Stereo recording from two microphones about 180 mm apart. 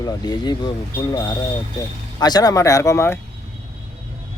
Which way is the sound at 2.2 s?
20° left (ahead or behind).